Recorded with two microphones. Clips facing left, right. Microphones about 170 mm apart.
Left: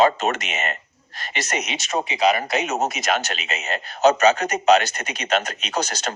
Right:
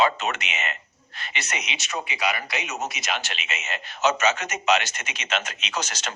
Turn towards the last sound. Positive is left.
turn(degrees=35)  # may be behind; listen again after turning